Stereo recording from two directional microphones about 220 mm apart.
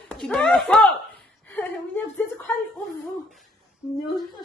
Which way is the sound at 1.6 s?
10° left (ahead or behind).